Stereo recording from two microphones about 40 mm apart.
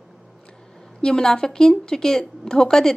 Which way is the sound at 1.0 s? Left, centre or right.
Left.